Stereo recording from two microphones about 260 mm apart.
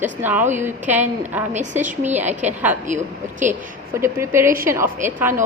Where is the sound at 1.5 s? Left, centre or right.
Right.